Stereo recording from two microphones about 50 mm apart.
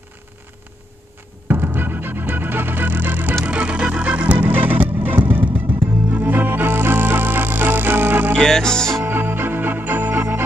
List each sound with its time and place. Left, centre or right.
1.5 s music: right
3.4 s music: right
8.4 s music: centre
9.0 s organ: right